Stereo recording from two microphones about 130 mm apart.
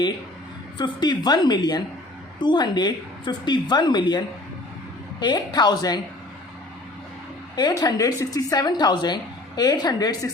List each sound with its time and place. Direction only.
0.8 s a woman's voice: 35° left (ahead or behind)
5.2 s a woman's voice: 35° left (ahead or behind)
7.5 s a woman's voice: 30° left (ahead or behind)